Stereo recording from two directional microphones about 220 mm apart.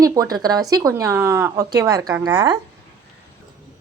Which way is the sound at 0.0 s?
15° right (ahead or behind).